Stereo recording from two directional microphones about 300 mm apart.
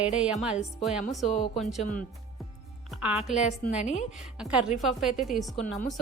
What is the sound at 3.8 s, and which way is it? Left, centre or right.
Speech, left.